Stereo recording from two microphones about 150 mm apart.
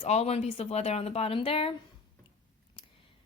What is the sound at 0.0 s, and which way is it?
A woman's voice, 45° left (ahead or behind).